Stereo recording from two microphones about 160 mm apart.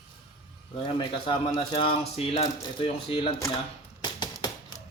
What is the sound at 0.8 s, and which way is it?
Speech, 30° left (ahead or behind).